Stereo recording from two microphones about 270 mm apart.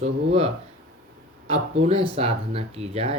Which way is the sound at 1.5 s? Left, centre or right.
Right.